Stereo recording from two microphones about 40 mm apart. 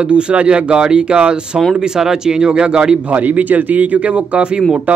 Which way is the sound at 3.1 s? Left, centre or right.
Right.